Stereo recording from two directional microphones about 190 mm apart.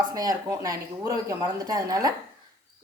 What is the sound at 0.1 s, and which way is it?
A man's voice, 20° right (ahead or behind).